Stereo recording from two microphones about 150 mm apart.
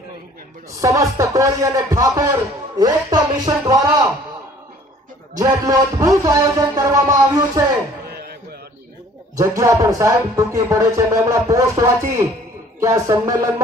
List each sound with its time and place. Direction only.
0.8 s speech: 20° right (ahead or behind)
5.4 s speech: 25° right (ahead or behind)
8.1 s a sound: 90° right
9.3 s speech: 20° right (ahead or behind)